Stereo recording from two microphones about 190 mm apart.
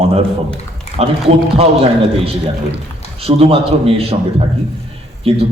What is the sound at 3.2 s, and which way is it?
Speech, 30° right (ahead or behind).